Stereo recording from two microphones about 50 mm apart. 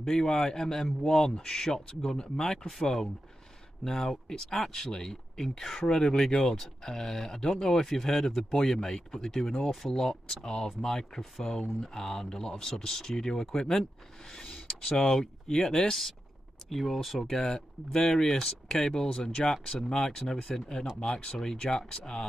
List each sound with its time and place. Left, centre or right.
0.0 s speech: centre
8.7 s speech: centre
16.6 s speech: centre